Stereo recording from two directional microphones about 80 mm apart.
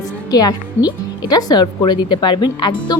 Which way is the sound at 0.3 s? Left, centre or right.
Left.